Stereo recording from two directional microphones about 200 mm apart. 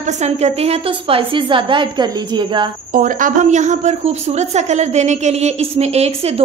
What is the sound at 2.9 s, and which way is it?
A woman's voice, 40° right (ahead or behind).